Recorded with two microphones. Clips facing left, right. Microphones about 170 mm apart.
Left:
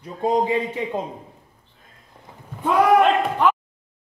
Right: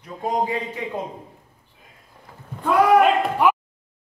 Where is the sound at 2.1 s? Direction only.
20° left (ahead or behind).